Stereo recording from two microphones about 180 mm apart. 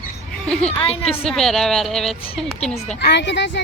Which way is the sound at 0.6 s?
35° left (ahead or behind).